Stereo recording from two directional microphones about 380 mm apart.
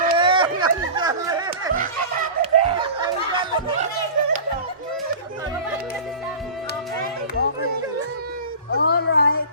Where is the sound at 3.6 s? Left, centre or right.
Centre.